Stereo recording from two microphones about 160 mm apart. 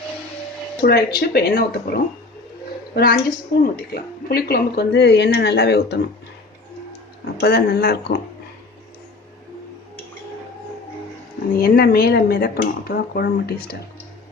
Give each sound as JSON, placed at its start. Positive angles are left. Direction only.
{"t": 0.8, "sound": "a woman's voice", "side_deg": 80}
{"t": 7.3, "sound": "a woman's voice", "side_deg": 90}
{"t": 11.5, "sound": "speech", "side_deg": 65}